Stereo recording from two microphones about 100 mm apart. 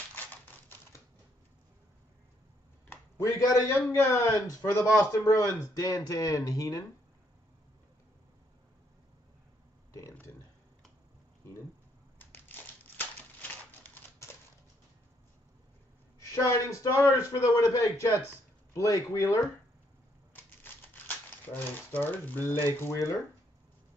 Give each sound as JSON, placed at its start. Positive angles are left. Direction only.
{"t": 2.9, "sound": "a man's voice", "side_deg": 30}
{"t": 12.2, "sound": "a sound", "side_deg": 20}
{"t": 16.2, "sound": "a man's voice", "side_deg": 30}
{"t": 20.6, "sound": "crumpling", "side_deg": 20}
{"t": 22.8, "sound": "speech", "side_deg": 30}